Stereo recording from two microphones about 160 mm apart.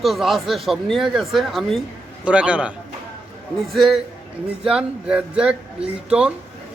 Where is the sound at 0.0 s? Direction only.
Centre (ahead or behind).